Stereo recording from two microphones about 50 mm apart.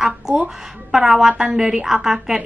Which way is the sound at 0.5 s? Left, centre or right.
Centre.